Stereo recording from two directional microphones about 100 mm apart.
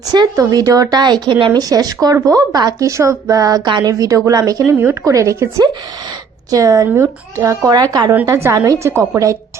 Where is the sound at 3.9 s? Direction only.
35° right (ahead or behind).